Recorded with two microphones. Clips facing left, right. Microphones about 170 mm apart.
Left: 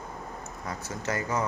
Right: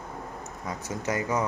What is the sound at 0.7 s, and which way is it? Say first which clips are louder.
Speech: right 2 dB; 15° right (ahead or behind).